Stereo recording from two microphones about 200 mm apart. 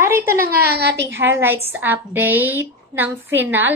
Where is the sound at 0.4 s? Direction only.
50° right (ahead or behind).